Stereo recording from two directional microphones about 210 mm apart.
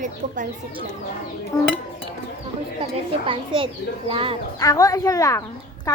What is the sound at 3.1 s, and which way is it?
A woman's voice, 25° right (ahead or behind).